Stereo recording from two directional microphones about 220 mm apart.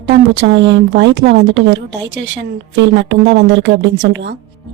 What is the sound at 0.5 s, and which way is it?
Speech, 55° right (ahead or behind).